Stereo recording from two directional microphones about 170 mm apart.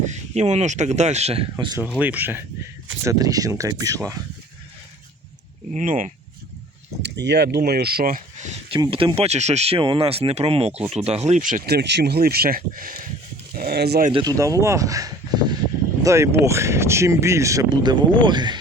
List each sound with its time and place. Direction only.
0.0 s speech: 40° right (ahead or behind); by 1.8 s 25° right (ahead or behind)
2.0 s speech: 10° right (ahead or behind)
5.7 s speech: 50° right (ahead or behind)
7.0 s speech: 90° right; by 8.5 s 50° right (ahead or behind)
8.7 s speech: 30° right (ahead or behind); by 13.0 s 55° right (ahead or behind)
13.6 s speech: 70° right (ahead or behind)
14.1 s speech: 25° right (ahead or behind)